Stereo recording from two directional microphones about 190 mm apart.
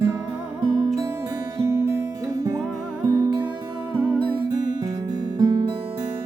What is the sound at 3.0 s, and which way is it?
Music, 20° right (ahead or behind).